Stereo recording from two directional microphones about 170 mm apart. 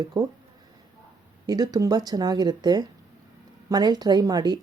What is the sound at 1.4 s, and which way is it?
Speech, 20° right (ahead or behind).